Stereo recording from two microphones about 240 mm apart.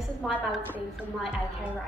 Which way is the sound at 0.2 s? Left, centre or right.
Centre.